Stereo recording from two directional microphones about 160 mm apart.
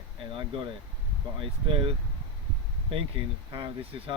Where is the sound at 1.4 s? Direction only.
35° right (ahead or behind).